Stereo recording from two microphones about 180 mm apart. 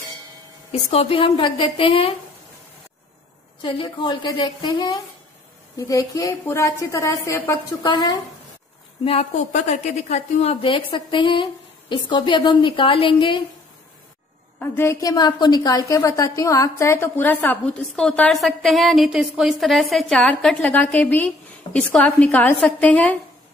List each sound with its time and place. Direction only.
0.7 s a woman's voice: 35° left (ahead or behind)
3.6 s a woman's voice: 25° left (ahead or behind)
9.0 s a woman's voice: 35° left (ahead or behind)
14.6 s a woman's voice: 15° left (ahead or behind)